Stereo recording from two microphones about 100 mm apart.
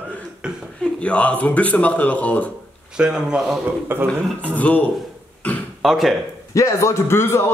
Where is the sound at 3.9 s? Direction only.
20° right (ahead or behind).